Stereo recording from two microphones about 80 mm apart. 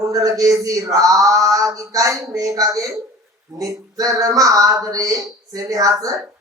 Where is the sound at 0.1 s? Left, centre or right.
Right.